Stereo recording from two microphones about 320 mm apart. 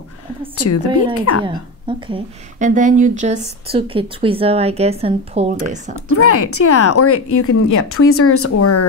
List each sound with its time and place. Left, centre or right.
0.6 s speech: left
1.4 s a woman's voice: centre
6.1 s speech: left